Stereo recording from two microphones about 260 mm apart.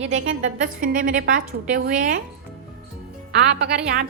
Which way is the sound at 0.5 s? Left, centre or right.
Right.